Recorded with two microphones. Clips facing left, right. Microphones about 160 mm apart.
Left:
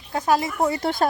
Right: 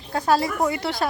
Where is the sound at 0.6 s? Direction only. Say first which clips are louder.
Left 2 dB; 40° left (ahead or behind).